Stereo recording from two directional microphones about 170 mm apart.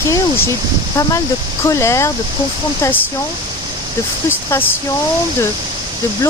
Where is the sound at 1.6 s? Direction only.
15° left (ahead or behind).